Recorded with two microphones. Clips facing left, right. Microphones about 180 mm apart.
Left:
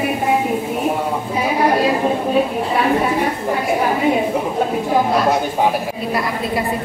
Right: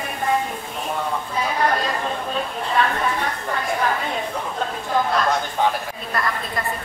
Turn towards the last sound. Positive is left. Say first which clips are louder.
# left 5 dB
turn(degrees=10)  # may be behind; listen again after turning